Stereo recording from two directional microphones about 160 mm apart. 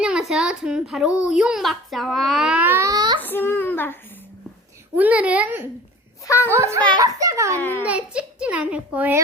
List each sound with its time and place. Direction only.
0.0 s a child's voice: 5° right (ahead or behind); by 3.2 s 25° right (ahead or behind)
3.2 s a child's voice: 10° left (ahead or behind)
4.9 s a child's voice: 10° right (ahead or behind)
6.2 s a child's voice: 15° left (ahead or behind)
6.5 s a child's voice: 15° right (ahead or behind)
7.6 s a child's voice: 10° left (ahead or behind)
7.9 s a child's voice: 5° right (ahead or behind)